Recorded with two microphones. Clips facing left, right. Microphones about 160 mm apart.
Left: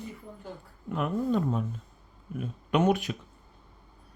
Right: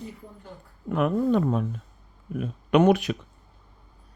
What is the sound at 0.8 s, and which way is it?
Speech, 70° right (ahead or behind).